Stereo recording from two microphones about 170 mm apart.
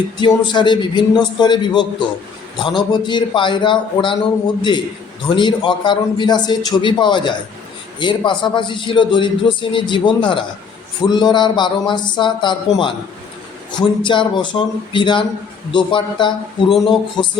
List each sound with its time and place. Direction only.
0.2 s a man's voice: 25° left (ahead or behind)
5.3 s a man's voice: 25° left (ahead or behind)
16.6 s speech: centre (ahead or behind)